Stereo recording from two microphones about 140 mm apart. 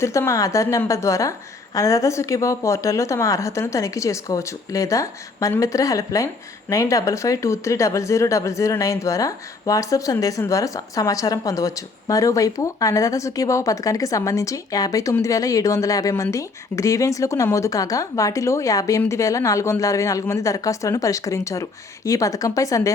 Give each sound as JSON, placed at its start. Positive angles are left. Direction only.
{"t": 0.0, "sound": "speech", "side_deg": 20}